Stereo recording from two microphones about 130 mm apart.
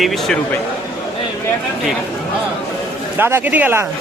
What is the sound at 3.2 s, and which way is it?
Speech, 15° right (ahead or behind).